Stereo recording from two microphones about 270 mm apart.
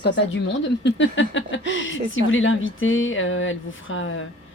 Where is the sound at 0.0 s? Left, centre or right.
Left.